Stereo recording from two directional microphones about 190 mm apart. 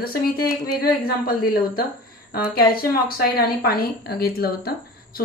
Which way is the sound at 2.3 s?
50° left (ahead or behind).